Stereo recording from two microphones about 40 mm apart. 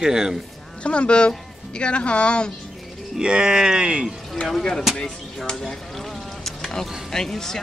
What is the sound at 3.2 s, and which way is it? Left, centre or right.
Speech, right.